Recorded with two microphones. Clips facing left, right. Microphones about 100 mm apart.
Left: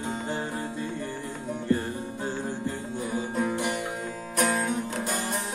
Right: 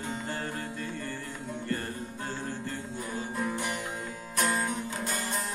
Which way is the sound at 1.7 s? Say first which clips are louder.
Left 8 dB; 20° left (ahead or behind).